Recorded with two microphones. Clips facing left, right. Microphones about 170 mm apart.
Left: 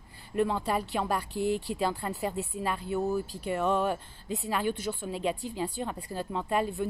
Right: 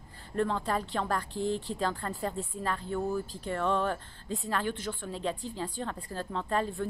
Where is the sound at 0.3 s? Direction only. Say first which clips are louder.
Left 2 dB; 10° left (ahead or behind).